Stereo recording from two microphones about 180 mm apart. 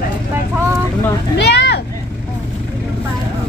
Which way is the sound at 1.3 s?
70° left (ahead or behind).